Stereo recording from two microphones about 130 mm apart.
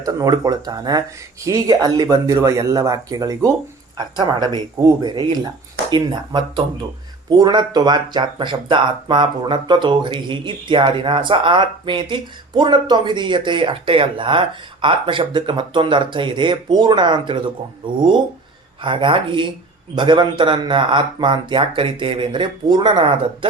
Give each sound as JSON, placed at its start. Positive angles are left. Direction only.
{"t": 0.0, "sound": "speech", "side_deg": -30}
{"t": 18.8, "sound": "speech", "side_deg": -40}